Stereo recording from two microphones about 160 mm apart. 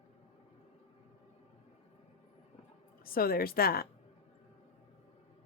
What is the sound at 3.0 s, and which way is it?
Speech, 65° left (ahead or behind).